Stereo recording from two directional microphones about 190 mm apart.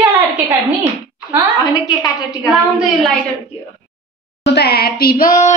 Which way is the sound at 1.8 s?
20° left (ahead or behind).